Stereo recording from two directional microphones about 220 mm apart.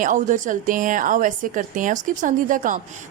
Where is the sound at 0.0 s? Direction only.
35° right (ahead or behind).